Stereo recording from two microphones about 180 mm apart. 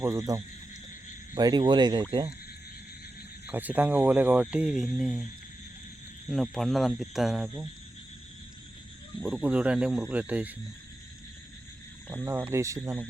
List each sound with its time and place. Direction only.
0.0 s speech: 15° right (ahead or behind)
3.4 s speech: 10° right (ahead or behind)
9.2 s speech: 5° right (ahead or behind)
12.0 s speech: 15° right (ahead or behind)